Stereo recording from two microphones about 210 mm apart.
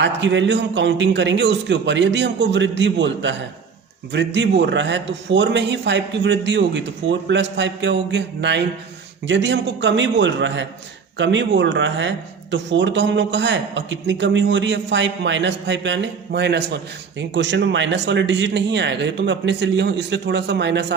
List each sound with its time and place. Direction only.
0.0 s speech: 60° right (ahead or behind)